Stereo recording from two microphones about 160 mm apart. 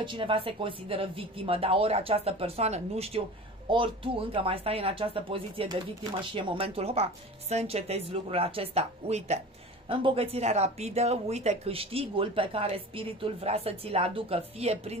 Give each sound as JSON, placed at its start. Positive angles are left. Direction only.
{"t": 0.0, "sound": "speech", "side_deg": -30}